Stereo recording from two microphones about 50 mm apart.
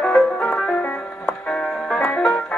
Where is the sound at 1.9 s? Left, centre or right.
Left.